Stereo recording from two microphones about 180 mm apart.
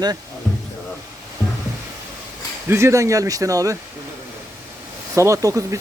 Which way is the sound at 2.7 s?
15° right (ahead or behind).